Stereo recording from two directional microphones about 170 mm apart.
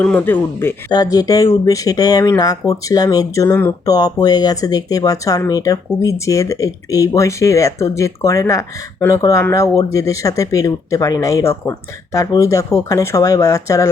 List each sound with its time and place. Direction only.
0.0 s speech: 10° left (ahead or behind)
0.9 s speech: 25° left (ahead or behind)